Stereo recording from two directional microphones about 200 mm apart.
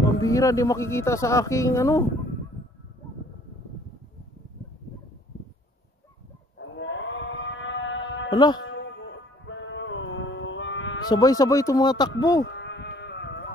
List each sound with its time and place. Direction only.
0.0 s speech: 15° left (ahead or behind)
6.6 s a sound: 70° left (ahead or behind)
8.3 s speech: 20° left (ahead or behind)
8.6 s music: 65° left (ahead or behind)
11.1 s speech: 20° left (ahead or behind)
12.4 s sheep: 60° left (ahead or behind)